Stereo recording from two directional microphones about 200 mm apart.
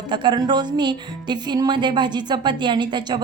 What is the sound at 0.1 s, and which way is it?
Speech, 20° right (ahead or behind).